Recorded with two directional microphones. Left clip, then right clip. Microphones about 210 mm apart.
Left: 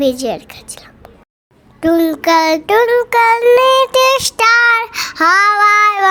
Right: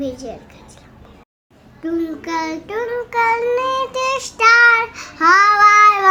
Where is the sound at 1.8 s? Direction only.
50° left (ahead or behind).